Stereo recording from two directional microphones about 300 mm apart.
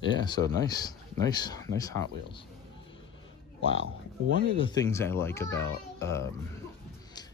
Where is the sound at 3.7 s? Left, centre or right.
Left.